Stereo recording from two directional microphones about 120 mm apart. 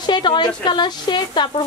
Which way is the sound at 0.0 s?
40° left (ahead or behind).